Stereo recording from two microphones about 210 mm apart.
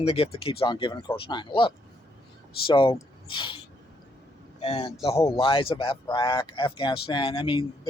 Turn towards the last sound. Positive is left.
turn(degrees=25)  # may be behind; listen again after turning